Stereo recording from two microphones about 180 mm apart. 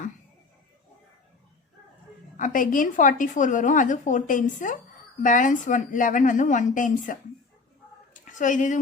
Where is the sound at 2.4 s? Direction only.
50° left (ahead or behind).